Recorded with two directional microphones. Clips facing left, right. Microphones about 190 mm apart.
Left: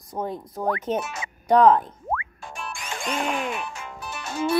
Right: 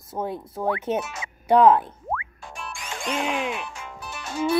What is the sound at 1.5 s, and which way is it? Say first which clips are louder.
Speech: even; 5° right (ahead or behind).